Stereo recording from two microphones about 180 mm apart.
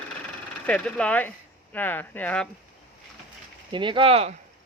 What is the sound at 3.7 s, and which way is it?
Speech, 25° right (ahead or behind).